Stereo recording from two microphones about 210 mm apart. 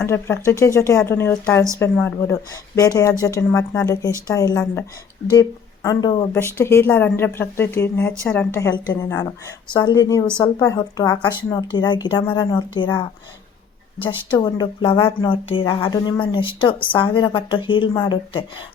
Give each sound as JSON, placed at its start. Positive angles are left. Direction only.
{"t": 0.0, "sound": "a woman's voice", "side_deg": 10}